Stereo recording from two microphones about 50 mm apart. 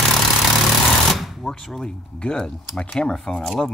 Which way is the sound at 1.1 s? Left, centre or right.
Centre.